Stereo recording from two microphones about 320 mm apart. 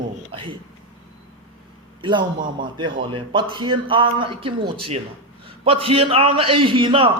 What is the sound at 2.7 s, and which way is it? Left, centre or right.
A man's voice, centre.